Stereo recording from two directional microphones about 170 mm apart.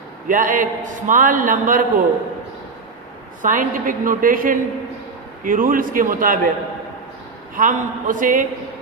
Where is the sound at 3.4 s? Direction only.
50° right (ahead or behind).